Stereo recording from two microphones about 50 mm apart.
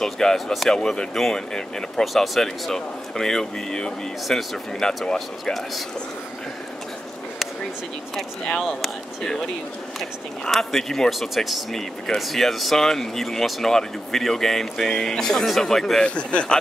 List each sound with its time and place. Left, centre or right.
0.0 s speech: centre
5.4 s speech: centre
8.6 s speech: centre
16.2 s a man's voice: left